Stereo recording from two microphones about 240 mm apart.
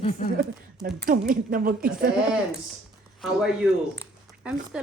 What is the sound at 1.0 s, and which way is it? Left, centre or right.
Speech, right.